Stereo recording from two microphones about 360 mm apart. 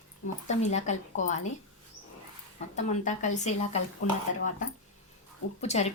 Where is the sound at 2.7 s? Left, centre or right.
Centre.